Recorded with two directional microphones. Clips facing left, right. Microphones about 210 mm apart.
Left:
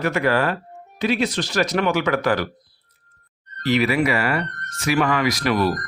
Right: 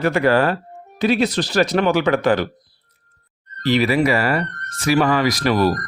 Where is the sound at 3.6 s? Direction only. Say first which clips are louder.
Right 2 dB; 35° right (ahead or behind).